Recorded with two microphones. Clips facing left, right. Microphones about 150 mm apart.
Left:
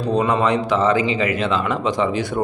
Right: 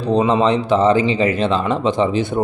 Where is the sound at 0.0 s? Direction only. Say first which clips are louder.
Right 3 dB; 25° right (ahead or behind).